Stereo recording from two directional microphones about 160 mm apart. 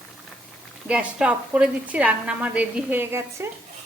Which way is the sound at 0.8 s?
10° right (ahead or behind).